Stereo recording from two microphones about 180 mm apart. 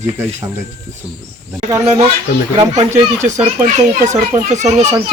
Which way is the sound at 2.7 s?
40° right (ahead or behind).